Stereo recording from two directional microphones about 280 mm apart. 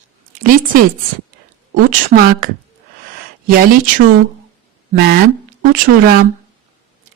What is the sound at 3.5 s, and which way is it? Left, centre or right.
Speech, right.